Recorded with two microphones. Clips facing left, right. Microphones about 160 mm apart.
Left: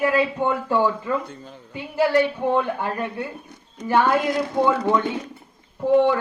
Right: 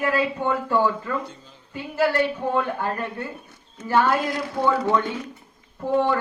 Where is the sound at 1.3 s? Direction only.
55° left (ahead or behind).